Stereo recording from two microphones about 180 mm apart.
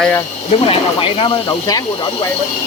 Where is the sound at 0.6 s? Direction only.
30° left (ahead or behind).